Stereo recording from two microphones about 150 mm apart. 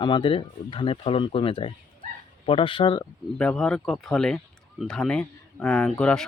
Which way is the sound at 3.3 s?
5° left (ahead or behind).